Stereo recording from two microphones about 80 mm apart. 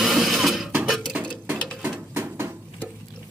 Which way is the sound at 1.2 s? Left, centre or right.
Centre.